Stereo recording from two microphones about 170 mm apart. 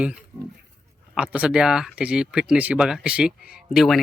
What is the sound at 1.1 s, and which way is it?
Speech, 5° right (ahead or behind).